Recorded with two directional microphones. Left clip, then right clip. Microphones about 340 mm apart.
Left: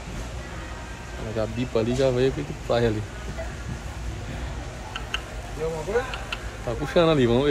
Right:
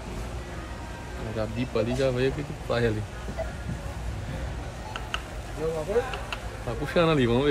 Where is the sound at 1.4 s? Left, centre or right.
Centre.